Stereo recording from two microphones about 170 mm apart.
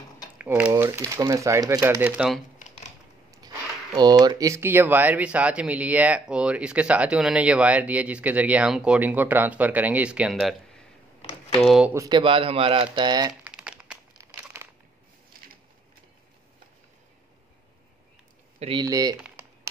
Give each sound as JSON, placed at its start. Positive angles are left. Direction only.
{"t": 0.4, "sound": "speech", "side_deg": -5}
{"t": 2.0, "sound": "speech", "side_deg": -10}
{"t": 3.3, "sound": "speech", "side_deg": -25}
{"t": 11.6, "sound": "speech", "side_deg": -5}
{"t": 11.9, "sound": "speech", "side_deg": -20}
{"t": 13.3, "sound": "crumpling", "side_deg": -5}
{"t": 14.5, "sound": "a sound", "side_deg": -15}
{"t": 18.6, "sound": "speech", "side_deg": -30}
{"t": 19.1, "sound": "a sound", "side_deg": -10}